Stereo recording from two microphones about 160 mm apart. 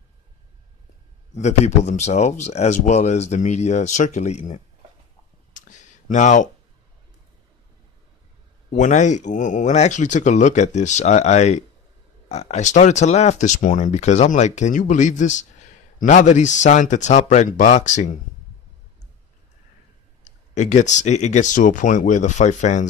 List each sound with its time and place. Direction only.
1.3 s speech: 45° left (ahead or behind)
5.5 s a sound: 50° left (ahead or behind)
8.7 s speech: 50° left (ahead or behind)
20.2 s speech: 45° left (ahead or behind)